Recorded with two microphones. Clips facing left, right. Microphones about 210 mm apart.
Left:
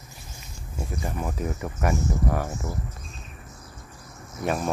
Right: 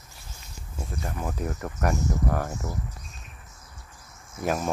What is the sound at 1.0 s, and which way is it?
Speech, 5° left (ahead or behind).